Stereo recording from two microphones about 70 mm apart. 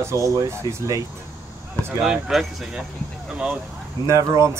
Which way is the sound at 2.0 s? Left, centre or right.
Centre.